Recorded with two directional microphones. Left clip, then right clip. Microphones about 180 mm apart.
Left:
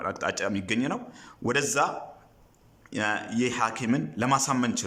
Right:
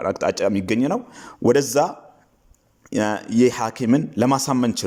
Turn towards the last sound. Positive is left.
turn(degrees=-30)  # may be behind; listen again after turning